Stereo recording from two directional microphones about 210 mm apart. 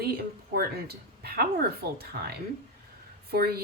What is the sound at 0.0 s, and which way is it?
Speech, 45° right (ahead or behind).